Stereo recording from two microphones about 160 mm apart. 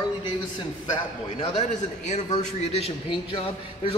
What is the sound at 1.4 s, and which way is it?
A man's voice, 45° left (ahead or behind).